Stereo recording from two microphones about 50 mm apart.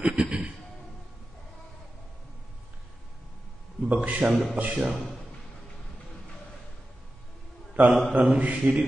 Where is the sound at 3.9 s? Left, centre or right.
Right.